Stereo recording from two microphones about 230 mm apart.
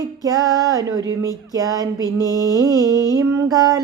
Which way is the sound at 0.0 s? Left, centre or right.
Centre.